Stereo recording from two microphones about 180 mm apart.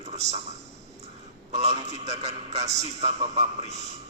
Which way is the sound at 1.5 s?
35° right (ahead or behind).